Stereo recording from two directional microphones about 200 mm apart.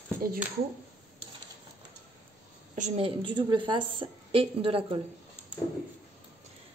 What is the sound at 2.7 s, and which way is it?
A woman's voice, 30° right (ahead or behind).